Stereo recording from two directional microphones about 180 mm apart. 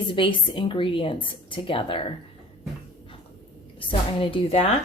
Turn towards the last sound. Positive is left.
turn(degrees=30)  # may be behind; listen again after turning